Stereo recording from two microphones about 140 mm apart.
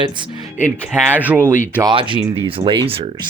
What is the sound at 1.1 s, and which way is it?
Speech, 10° right (ahead or behind).